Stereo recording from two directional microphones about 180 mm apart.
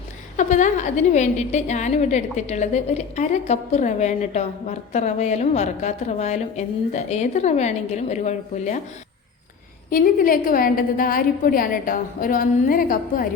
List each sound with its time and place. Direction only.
0.3 s a woman's voice: 40° left (ahead or behind)
9.9 s a woman's voice: 50° left (ahead or behind)